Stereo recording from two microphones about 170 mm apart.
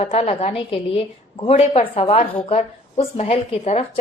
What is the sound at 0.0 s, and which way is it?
Speech, 35° left (ahead or behind).